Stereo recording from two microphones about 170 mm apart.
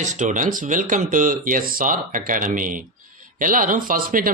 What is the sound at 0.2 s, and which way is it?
A man's voice, 50° right (ahead or behind).